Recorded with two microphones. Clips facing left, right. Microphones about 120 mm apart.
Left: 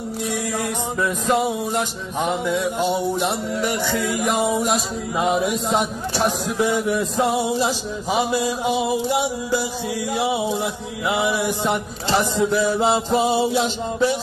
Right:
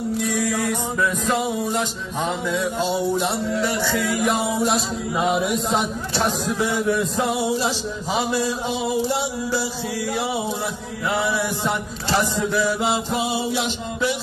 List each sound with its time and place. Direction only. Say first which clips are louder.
0.3 s music: even; 25° left (ahead or behind)
2.2 s music: left 2 dB; 15° left (ahead or behind)
5.3 s chant: left 2 dB; centre (ahead or behind)
5.8 s music: left 2 dB; 15° left (ahead or behind)
13.1 s music: left 5 dB; 40° left (ahead or behind)